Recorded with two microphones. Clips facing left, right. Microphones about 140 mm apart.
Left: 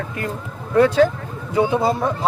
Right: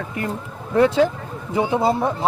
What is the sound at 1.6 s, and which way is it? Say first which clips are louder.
Speech: left 1 dB; 20° right (ahead or behind).